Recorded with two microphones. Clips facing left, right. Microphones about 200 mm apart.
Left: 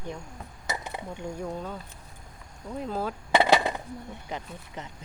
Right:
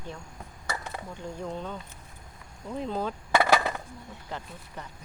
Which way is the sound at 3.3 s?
20° left (ahead or behind).